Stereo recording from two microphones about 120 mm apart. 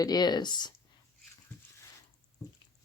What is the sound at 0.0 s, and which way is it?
Speech, 35° left (ahead or behind).